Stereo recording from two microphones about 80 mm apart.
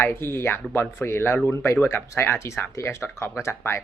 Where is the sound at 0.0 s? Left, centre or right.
Left.